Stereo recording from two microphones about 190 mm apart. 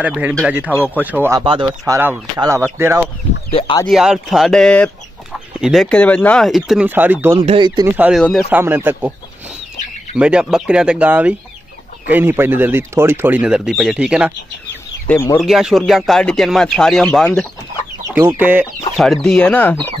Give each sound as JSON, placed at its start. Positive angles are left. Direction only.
{"t": 0.0, "sound": "speech", "side_deg": -10}
{"t": 1.4, "sound": "speech", "side_deg": -25}
{"t": 2.0, "sound": "speech", "side_deg": -15}
{"t": 3.5, "sound": "speech", "side_deg": 25}
{"t": 3.8, "sound": "speech", "side_deg": 0}
{"t": 7.3, "sound": "speech", "side_deg": -25}
{"t": 8.0, "sound": "speech", "side_deg": 0}
{"t": 10.1, "sound": "speech", "side_deg": -5}
{"t": 15.0, "sound": "speech", "side_deg": 10}
{"t": 15.4, "sound": "speech", "side_deg": 0}
{"t": 18.1, "sound": "speech", "side_deg": -10}
{"t": 19.2, "sound": "speech", "side_deg": 5}